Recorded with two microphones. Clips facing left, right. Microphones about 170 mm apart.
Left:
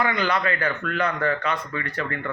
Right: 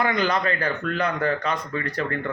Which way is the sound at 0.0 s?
40° right (ahead or behind).